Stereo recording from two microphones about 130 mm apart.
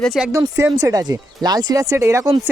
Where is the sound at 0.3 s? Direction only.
25° right (ahead or behind).